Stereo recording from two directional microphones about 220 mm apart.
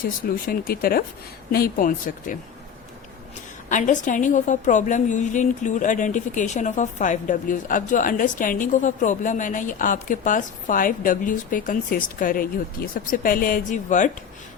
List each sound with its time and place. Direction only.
0.0 s a woman's voice: 40° left (ahead or behind)
3.7 s a woman's voice: 35° left (ahead or behind)